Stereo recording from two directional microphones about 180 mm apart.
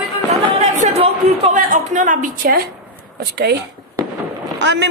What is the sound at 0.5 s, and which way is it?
A woman's voice, 35° right (ahead or behind).